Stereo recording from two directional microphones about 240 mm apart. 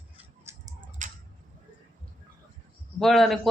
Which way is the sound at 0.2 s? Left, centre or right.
Centre.